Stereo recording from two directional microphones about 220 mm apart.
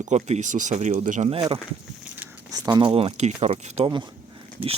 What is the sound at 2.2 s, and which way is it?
Speech, 15° right (ahead or behind).